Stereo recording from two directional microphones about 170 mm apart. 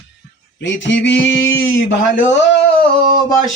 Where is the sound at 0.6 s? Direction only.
90° left.